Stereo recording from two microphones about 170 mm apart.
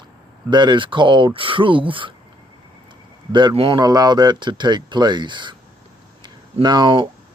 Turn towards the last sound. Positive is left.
turn(degrees=-25)  # may be behind; listen again after turning